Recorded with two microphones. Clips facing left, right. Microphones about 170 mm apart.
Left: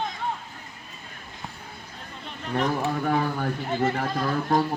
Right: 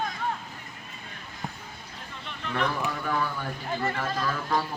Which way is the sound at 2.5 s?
45° left (ahead or behind).